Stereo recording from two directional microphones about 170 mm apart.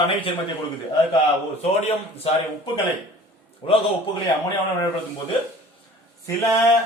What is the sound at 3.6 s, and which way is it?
Speech, 35° left (ahead or behind).